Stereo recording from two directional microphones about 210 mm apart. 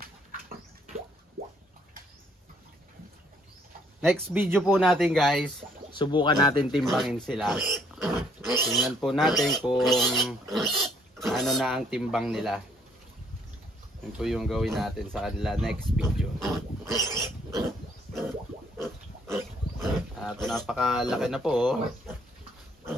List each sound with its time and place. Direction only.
4.1 s speech: 5° right (ahead or behind)
5.9 s speech: 20° left (ahead or behind)
6.7 s speech: centre (ahead or behind)
14.1 s speech: centre (ahead or behind)
16.8 s roaring cats: 15° right (ahead or behind)
19.8 s speech: centre (ahead or behind)